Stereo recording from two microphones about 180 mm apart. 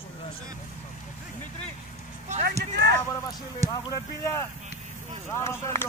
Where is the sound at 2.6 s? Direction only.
70° right (ahead or behind).